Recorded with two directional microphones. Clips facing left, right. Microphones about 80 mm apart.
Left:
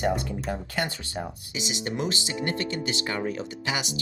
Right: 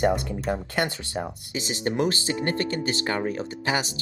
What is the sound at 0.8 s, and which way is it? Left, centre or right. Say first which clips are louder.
Speech: right 3 dB; right.